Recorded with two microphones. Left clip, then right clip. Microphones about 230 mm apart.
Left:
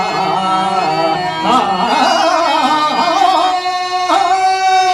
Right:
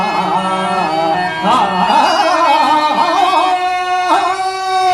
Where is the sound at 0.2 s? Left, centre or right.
Left.